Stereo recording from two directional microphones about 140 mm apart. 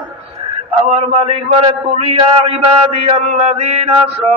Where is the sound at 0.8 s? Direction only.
45° right (ahead or behind).